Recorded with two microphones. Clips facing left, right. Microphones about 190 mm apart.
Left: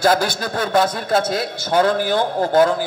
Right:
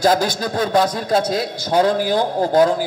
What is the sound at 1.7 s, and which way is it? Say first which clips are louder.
A man's voice: right 1 dB; 35° right (ahead or behind).